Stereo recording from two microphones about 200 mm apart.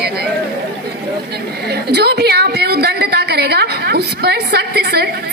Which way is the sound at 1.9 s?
55° right (ahead or behind).